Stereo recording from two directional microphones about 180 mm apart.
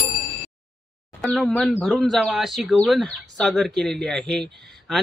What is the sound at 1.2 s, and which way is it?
Speech, centre (ahead or behind).